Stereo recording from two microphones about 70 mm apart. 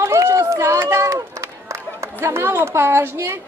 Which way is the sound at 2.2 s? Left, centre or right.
Right.